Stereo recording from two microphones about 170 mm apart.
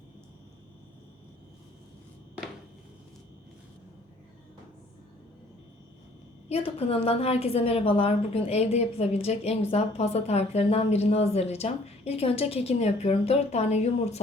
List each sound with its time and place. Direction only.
6.5 s a woman's voice: 35° left (ahead or behind)